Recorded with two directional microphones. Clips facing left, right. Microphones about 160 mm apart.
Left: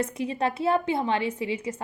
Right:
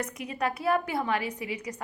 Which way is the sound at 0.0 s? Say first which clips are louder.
Left 4 dB; 30° left (ahead or behind).